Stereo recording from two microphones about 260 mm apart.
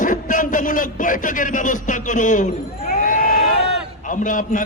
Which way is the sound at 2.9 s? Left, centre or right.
Left.